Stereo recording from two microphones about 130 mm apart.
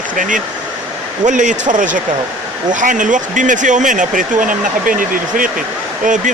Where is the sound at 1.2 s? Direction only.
75° right (ahead or behind); by 5.5 s 90° right.